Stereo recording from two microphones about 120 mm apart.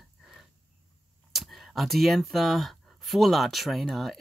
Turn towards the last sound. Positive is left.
turn(degrees=0)  # may be behind; listen again after turning